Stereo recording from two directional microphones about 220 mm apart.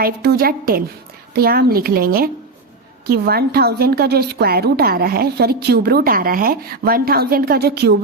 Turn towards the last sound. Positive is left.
turn(degrees=-45)  # may be behind; listen again after turning